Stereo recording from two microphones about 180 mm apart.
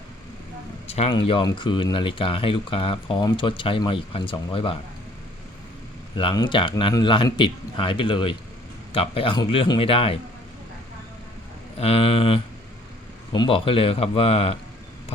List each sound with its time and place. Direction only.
0.9 s speech: 35° left (ahead or behind)
6.1 s a man's voice: 25° left (ahead or behind)
11.8 s a man's voice: 35° left (ahead or behind)